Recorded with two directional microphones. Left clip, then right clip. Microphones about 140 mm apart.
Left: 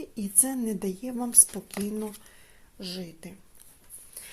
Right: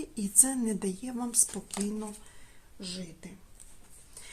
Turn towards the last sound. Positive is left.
turn(degrees=50)  # may be behind; listen again after turning